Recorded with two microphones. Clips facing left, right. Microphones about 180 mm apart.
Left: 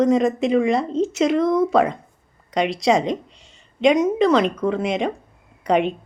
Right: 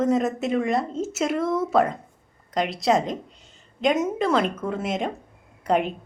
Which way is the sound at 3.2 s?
80° left.